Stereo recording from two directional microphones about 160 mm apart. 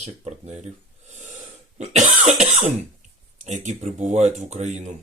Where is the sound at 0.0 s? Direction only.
45° right (ahead or behind).